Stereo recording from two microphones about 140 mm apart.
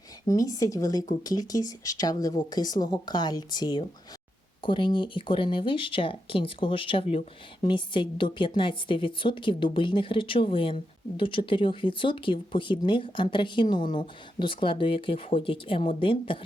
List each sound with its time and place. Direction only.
0.3 s speech: 25° left (ahead or behind)